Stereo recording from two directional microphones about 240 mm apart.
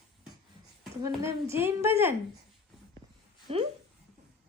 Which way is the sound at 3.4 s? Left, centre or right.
Right.